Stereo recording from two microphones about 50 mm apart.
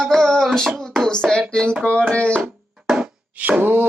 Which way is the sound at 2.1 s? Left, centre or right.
Left.